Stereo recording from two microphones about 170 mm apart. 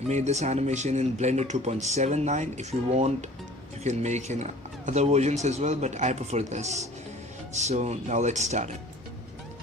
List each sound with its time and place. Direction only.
0.0 s speech: 40° right (ahead or behind)